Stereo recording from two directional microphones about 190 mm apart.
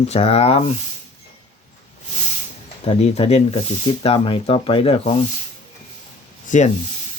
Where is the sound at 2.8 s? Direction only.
35° left (ahead or behind).